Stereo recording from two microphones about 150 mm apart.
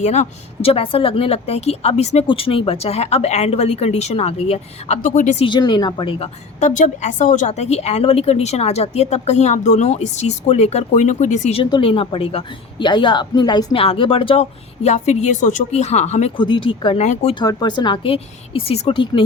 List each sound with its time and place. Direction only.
0.0 s a woman's voice: 50° left (ahead or behind)
5.0 s speech: 55° left (ahead or behind)
5.5 s a woman's voice: 30° left (ahead or behind); by 11.6 s 50° left (ahead or behind)
11.6 s a woman's voice: 35° left (ahead or behind)
16.4 s a woman's voice: 35° left (ahead or behind)
17.0 s a woman's voice: 50° left (ahead or behind)
17.4 s a woman's voice: 25° left (ahead or behind)